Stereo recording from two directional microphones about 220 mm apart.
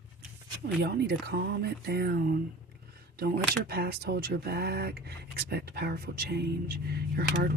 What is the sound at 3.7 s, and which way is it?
Speech, 45° right (ahead or behind).